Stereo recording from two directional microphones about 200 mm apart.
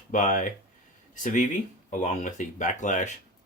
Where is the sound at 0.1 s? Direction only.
40° left (ahead or behind).